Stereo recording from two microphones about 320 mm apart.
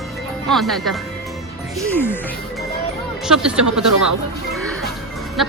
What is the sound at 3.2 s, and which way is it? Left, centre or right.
Speech, centre.